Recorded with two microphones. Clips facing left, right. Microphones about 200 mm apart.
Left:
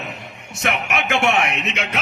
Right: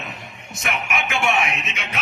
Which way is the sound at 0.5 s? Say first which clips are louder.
Left 3 dB; 70° left (ahead or behind).